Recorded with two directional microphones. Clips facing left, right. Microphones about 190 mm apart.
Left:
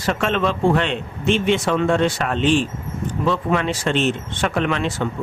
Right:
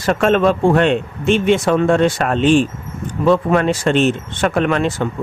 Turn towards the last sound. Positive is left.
turn(degrees=-45)  # may be behind; listen again after turning